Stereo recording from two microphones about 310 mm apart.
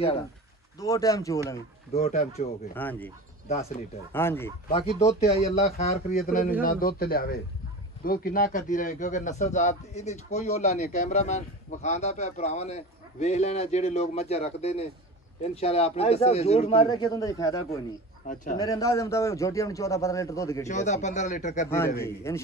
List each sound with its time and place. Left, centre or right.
0.7 s a man's voice: centre
2.7 s speech: centre
3.4 s a man's voice: left
4.1 s a man's voice: centre
4.6 s a man's voice: centre
18.2 s a man's voice: left
18.6 s a man's voice: centre
20.6 s a man's voice: left
21.6 s a man's voice: centre